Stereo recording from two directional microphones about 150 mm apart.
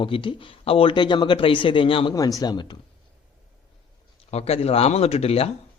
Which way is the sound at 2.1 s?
25° left (ahead or behind).